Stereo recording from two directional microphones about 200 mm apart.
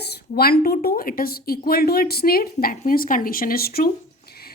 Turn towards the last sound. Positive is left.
turn(degrees=50)  # may be behind; listen again after turning